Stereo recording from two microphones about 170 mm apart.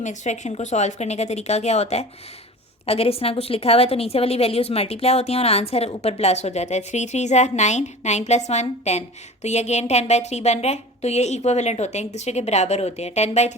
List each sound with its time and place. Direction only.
0.0 s a woman's voice: 45° left (ahead or behind)